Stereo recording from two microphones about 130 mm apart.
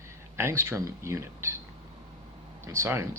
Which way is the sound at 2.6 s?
20° right (ahead or behind).